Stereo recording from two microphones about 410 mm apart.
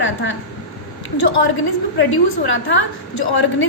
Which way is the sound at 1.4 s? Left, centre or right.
Left.